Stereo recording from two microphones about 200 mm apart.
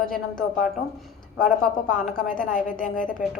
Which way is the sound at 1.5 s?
40° left (ahead or behind).